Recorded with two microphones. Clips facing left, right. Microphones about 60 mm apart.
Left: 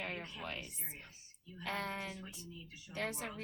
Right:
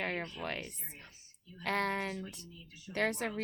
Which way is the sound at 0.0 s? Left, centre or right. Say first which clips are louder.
Right 6 dB; right.